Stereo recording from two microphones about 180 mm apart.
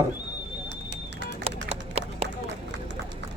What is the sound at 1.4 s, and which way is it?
Run, 35° right (ahead or behind).